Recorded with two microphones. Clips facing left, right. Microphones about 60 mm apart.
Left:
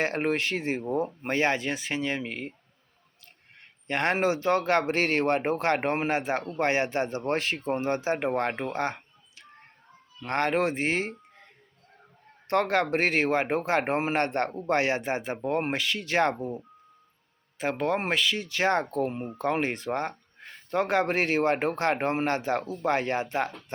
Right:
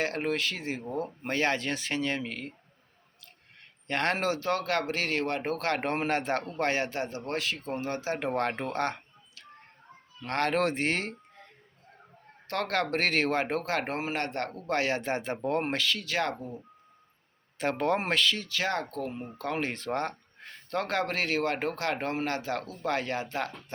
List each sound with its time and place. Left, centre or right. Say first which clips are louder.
0.0 s speech: left 3 dB; left; by 2.3 s centre
3.8 s speech: left 3 dB; centre
6.6 s speech: left 6 dB; left
8.3 s speech: left 2 dB; centre
10.2 s speech: left 2 dB; centre
10.6 s speech: left 2 dB; centre
12.5 s speech: left 5 dB; left
17.6 s speech: even; centre
18.4 s speech: left 5 dB; left